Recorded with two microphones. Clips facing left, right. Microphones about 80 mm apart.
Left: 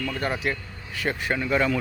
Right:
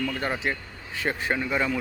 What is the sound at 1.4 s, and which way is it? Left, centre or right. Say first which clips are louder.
Speech: left 3 dB; centre.